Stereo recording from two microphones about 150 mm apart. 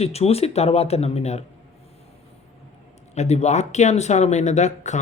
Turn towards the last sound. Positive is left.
turn(degrees=50)  # may be behind; listen again after turning